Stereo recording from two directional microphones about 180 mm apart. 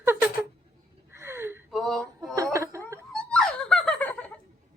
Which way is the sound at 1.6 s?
Centre (ahead or behind).